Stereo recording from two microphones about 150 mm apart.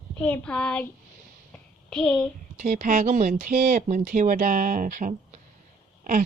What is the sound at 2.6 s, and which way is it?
A woman's voice, 60° right (ahead or behind).